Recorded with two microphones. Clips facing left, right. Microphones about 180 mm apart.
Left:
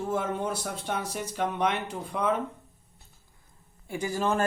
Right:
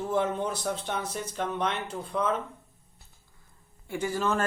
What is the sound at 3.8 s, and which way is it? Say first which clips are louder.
Speech: even; 15° left (ahead or behind).